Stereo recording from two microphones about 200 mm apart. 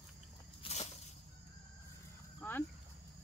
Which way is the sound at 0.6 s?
30° left (ahead or behind).